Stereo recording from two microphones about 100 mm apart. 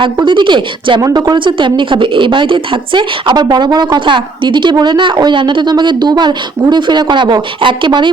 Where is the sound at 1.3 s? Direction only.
55° right (ahead or behind).